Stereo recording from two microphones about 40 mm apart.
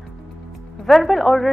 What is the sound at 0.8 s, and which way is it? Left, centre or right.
Speech, centre.